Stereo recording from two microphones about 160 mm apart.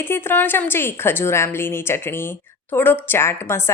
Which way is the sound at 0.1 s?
15° left (ahead or behind).